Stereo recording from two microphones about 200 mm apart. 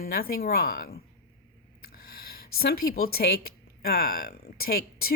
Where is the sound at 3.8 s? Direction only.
50° left (ahead or behind).